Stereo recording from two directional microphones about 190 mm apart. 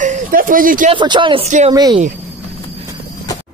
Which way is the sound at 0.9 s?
25° right (ahead or behind).